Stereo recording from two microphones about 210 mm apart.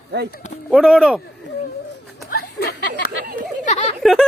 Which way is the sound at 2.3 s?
45° left (ahead or behind).